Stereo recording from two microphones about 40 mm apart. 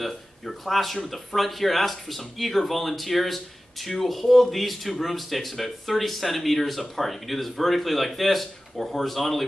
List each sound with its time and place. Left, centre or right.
0.0 s speech: centre